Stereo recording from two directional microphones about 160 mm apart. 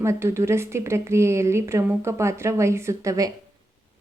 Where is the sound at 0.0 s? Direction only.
15° right (ahead or behind).